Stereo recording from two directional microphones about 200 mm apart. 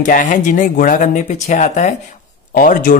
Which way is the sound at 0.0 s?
40° left (ahead or behind).